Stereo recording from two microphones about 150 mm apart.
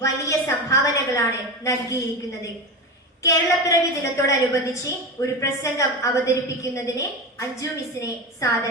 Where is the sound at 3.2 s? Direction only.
20° left (ahead or behind).